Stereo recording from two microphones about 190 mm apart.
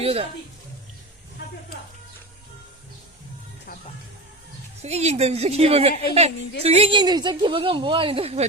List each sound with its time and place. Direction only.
0.0 s a woman's voice: 30° right (ahead or behind)
4.8 s a woman's voice: 35° right (ahead or behind)